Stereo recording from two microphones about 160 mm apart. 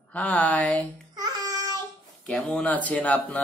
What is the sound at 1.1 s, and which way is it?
Babbling, 25° right (ahead or behind).